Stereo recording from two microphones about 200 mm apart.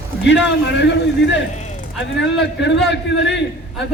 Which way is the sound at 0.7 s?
60° left (ahead or behind).